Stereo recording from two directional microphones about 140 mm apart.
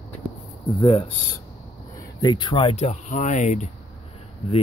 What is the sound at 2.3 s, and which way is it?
Speech, 35° left (ahead or behind).